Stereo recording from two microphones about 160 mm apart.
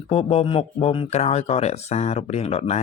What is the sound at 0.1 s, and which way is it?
Speech, 40° left (ahead or behind).